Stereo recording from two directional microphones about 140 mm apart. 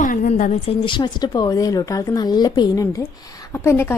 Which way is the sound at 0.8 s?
30° left (ahead or behind).